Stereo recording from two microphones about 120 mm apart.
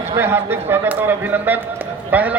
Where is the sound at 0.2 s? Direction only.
20° right (ahead or behind).